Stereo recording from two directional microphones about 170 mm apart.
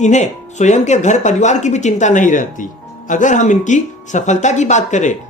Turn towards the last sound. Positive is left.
turn(degrees=45)  # may be behind; listen again after turning